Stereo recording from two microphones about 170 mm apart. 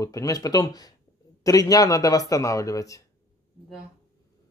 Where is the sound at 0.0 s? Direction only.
20° left (ahead or behind).